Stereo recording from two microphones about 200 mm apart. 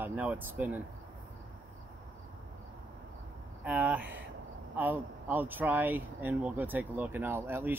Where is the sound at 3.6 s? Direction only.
5° right (ahead or behind).